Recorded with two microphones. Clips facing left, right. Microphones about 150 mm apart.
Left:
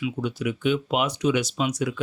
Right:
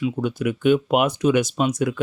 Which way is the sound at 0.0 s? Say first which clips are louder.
Right 4 dB; 50° right (ahead or behind).